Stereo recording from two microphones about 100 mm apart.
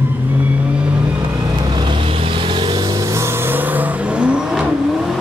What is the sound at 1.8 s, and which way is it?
Vehicle, 55° right (ahead or behind).